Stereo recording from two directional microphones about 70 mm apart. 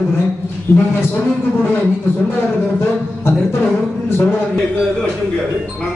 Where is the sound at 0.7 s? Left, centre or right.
Left.